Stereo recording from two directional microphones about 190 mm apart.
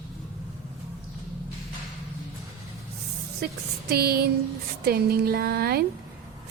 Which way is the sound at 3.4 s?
55° right (ahead or behind).